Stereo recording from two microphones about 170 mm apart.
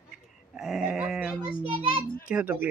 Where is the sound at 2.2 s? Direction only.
10° right (ahead or behind).